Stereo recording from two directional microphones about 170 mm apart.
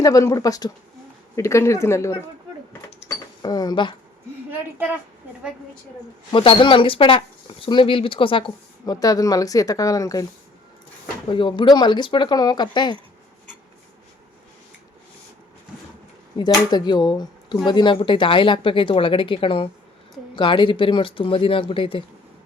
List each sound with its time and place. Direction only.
0.0 s speech: 20° left (ahead or behind)
3.4 s speech: 25° left (ahead or behind)
6.3 s speech: 30° left (ahead or behind)
11.3 s speech: 30° left (ahead or behind)
16.4 s speech: 25° left (ahead or behind)